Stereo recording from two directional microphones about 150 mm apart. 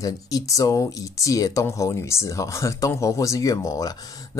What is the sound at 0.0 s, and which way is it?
Speech, 20° left (ahead or behind).